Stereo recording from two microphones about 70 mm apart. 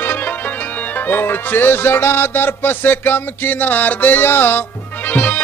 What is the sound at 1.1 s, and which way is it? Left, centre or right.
Music, left.